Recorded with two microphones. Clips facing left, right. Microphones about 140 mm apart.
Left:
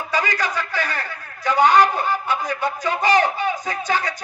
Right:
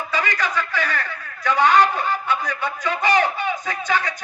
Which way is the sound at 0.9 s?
35° left (ahead or behind).